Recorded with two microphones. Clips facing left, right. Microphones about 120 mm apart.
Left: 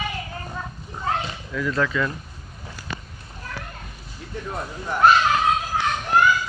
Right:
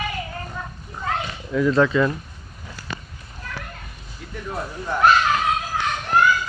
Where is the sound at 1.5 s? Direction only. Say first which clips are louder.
Right 6 dB; 25° right (ahead or behind).